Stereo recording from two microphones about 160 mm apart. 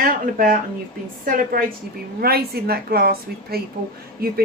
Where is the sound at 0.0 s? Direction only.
60° right (ahead or behind).